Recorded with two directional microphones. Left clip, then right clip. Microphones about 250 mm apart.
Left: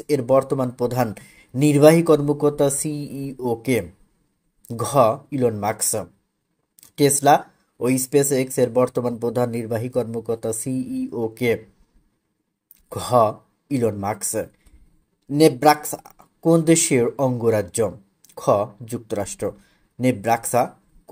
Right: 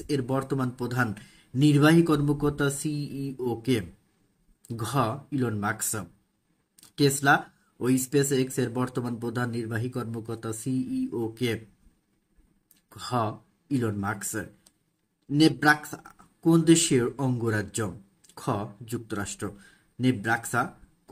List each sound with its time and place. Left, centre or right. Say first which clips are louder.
0.1 s speech: left 11 dB; centre
2.9 s speech: left 4 dB; left
3.3 s speech: left 6 dB; centre
12.9 s speech: left 12 dB; centre